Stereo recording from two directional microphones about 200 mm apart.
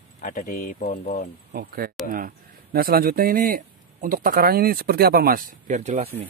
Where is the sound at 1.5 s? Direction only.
50° right (ahead or behind); by 6.2 s 30° right (ahead or behind).